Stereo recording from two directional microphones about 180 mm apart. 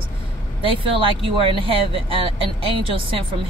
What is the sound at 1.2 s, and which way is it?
Speech, 30° right (ahead or behind).